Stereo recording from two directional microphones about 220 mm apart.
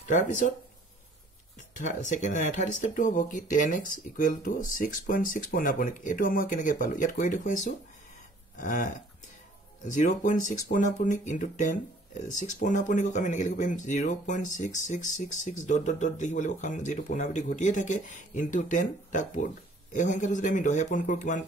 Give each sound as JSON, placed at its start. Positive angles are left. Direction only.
{"t": 1.8, "sound": "speech", "side_deg": 35}